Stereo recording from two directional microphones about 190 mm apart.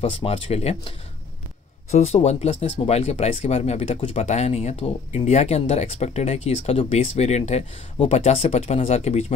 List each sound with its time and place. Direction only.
0.1 s speech: 30° left (ahead or behind)